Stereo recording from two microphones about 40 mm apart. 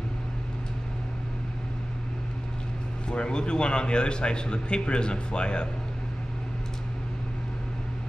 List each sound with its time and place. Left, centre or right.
3.1 s a man's voice: left